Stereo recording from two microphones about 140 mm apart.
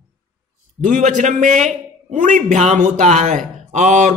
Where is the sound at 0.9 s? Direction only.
65° right (ahead or behind).